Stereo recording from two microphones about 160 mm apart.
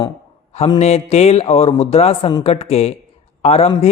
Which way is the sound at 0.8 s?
40° left (ahead or behind).